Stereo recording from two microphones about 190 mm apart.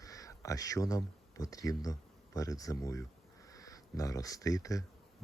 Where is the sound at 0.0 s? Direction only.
15° left (ahead or behind).